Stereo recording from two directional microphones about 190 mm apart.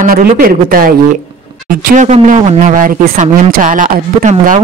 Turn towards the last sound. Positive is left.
turn(degrees=-45)  # may be behind; listen again after turning